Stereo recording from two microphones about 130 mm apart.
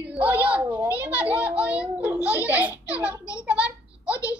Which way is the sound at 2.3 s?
10° right (ahead or behind).